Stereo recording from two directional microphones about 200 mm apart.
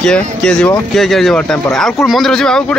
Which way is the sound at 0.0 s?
5° left (ahead or behind).